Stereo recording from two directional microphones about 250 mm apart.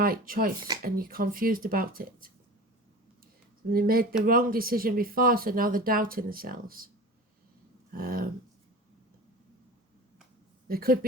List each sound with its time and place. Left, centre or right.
0.0 s speech: right
3.7 s speech: right
7.9 s speech: right
10.7 s speech: right